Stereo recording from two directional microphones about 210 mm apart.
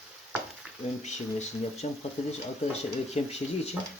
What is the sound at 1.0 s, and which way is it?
Speech, 30° left (ahead or behind).